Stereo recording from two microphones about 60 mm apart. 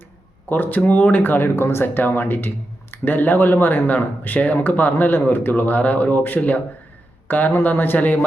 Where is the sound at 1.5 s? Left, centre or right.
Left.